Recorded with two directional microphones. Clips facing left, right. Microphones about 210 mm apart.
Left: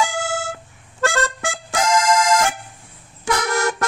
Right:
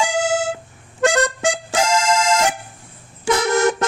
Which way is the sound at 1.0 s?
20° right (ahead or behind).